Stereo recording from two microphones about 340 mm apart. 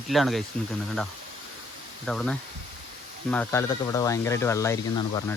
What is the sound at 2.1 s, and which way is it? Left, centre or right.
Speech, centre.